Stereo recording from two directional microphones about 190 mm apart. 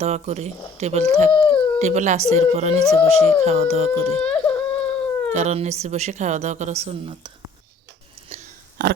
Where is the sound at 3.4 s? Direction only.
35° right (ahead or behind).